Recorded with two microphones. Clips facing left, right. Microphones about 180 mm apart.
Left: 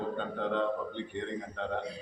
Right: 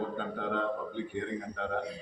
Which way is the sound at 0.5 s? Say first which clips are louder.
Left 1 dB; 5° right (ahead or behind).